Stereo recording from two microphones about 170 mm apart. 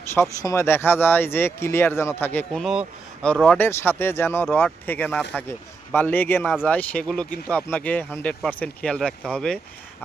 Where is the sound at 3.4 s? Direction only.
10° left (ahead or behind).